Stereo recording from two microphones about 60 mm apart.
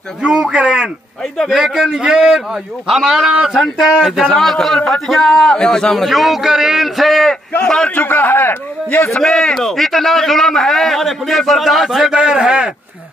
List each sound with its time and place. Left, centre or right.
0.2 s a man's voice: centre
4.2 s a man's voice: centre
6.0 s a man's voice: centre
7.6 s a man's voice: centre
7.9 s a man's voice: left
9.1 s a man's voice: centre